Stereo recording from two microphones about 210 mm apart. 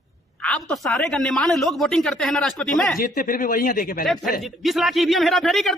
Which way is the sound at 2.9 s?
45° left (ahead or behind).